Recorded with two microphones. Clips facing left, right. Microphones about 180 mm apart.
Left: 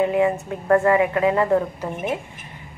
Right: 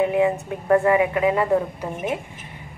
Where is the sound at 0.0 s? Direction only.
20° right (ahead or behind).